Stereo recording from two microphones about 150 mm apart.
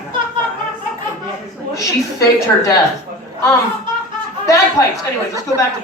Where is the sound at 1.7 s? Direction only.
20° left (ahead or behind).